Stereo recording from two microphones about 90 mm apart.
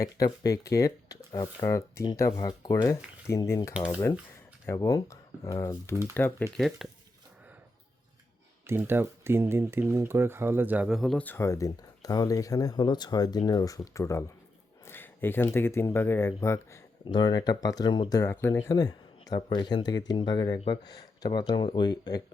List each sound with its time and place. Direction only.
0.4 s speech: 40° left (ahead or behind)
4.8 s speech: 40° left (ahead or behind); by 6.5 s 25° left (ahead or behind)
6.6 s speech: centre (ahead or behind)
8.6 s speech: 25° right (ahead or behind)
10.8 s speech: centre (ahead or behind)
11.2 s speech: 20° left (ahead or behind)
11.4 s speech: 35° left (ahead or behind)
17.1 s speech: 55° left (ahead or behind)
18.2 s speech: 30° left (ahead or behind)
18.7 s a sound: 40° left (ahead or behind)
19.5 s speech: 55° left (ahead or behind)